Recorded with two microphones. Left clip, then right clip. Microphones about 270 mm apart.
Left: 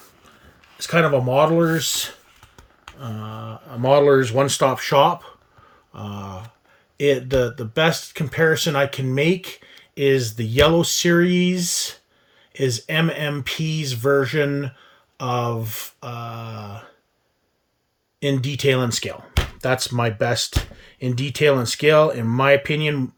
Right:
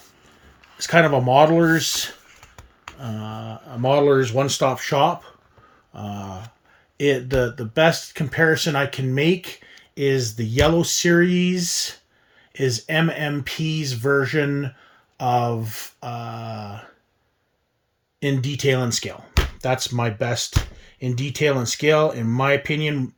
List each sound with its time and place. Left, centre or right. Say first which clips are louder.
0.9 s speech: right 2 dB; centre
18.2 s speech: left 2 dB; centre